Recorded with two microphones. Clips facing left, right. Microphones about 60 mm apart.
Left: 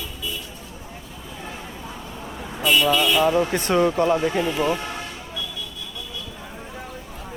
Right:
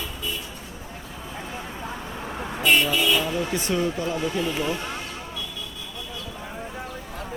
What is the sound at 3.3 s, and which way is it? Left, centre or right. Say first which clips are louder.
Speech: left 6 dB; left.